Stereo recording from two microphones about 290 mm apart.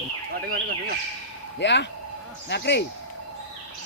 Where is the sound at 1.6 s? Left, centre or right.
Left.